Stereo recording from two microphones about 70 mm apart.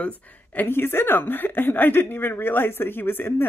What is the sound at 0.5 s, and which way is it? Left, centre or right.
A woman's voice, left.